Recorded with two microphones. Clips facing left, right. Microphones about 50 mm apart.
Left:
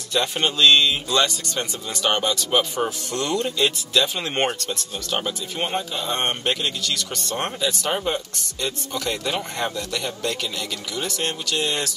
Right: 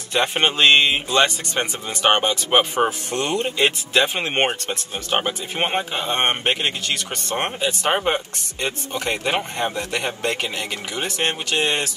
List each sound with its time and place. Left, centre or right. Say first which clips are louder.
0.1 s speech: right 3 dB; right